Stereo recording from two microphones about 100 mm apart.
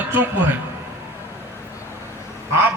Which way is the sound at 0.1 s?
20° right (ahead or behind).